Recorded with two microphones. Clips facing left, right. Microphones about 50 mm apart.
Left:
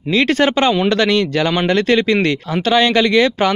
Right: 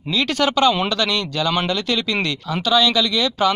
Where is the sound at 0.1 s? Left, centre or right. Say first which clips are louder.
Left 5 dB; left.